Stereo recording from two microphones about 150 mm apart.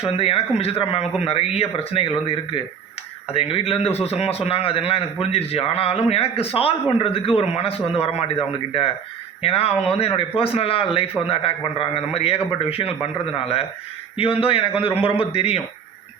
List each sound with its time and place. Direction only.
0.0 s a man's voice: 40° left (ahead or behind)